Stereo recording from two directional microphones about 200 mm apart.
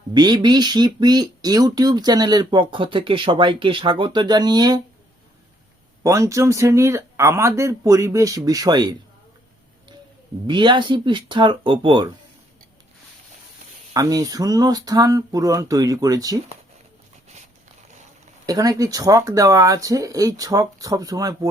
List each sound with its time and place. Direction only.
0.1 s speech: 20° right (ahead or behind)
6.0 s speech: 15° right (ahead or behind)
10.4 s speech: 25° right (ahead or behind)
13.9 s speech: 20° right (ahead or behind)
18.4 s speech: 20° right (ahead or behind)